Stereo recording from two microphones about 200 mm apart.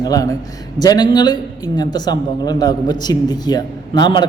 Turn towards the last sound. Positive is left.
turn(degrees=20)  # may be behind; listen again after turning